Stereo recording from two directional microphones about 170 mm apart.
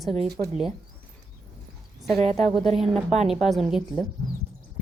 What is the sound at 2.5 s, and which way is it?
A woman's voice, centre (ahead or behind).